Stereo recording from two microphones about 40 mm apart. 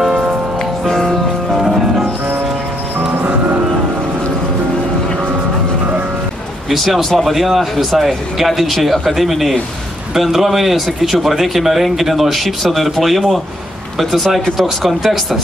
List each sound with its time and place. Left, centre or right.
0.0 s music: centre
0.8 s music: centre
1.5 s music: centre
3.3 s music: right
6.7 s a man's voice: centre
14.4 s speech: centre